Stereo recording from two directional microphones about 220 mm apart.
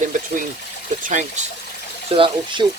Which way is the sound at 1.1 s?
35° right (ahead or behind).